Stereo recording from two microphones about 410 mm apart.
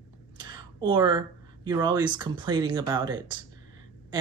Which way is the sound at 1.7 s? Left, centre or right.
Centre.